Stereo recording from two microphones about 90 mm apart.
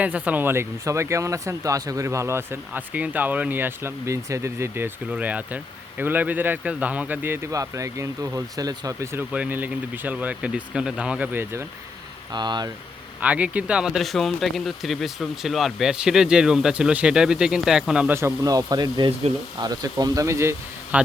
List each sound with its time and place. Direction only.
0.0 s speech: 15° right (ahead or behind)
2.7 s speech: 15° right (ahead or behind)
5.0 s speech: 15° right (ahead or behind)
7.5 s speech: 35° right (ahead or behind)
9.3 s speech: 15° right (ahead or behind)
11.3 s speech: 25° right (ahead or behind)
12.3 s speech: 55° right (ahead or behind)
13.2 s speech: 15° right (ahead or behind)
18.1 s speech: 25° right (ahead or behind)
18.4 s speech: 45° right (ahead or behind)
20.9 s speech: 15° right (ahead or behind)